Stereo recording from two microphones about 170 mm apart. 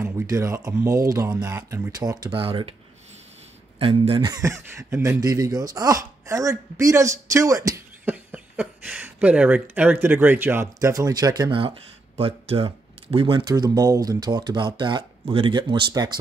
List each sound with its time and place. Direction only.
0.0 s a sound: 15° right (ahead or behind)
0.7 s speech: 20° right (ahead or behind)
3.8 s speech: 30° right (ahead or behind)